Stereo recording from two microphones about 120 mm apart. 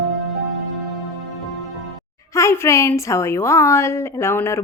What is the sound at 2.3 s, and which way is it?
A woman's voice, 25° left (ahead or behind).